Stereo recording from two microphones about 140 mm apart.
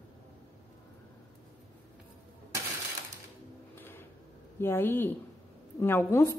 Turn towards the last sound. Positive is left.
turn(degrees=20)  # may be behind; listen again after turning